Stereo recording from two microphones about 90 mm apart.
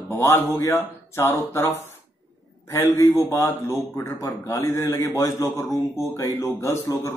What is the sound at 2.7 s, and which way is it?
Speech, 25° left (ahead or behind).